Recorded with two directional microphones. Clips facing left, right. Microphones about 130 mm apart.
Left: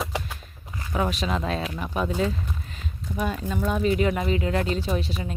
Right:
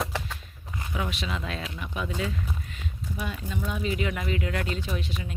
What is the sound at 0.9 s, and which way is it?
Speech, 40° left (ahead or behind).